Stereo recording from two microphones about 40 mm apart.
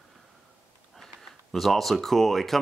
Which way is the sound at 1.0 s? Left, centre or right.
Centre.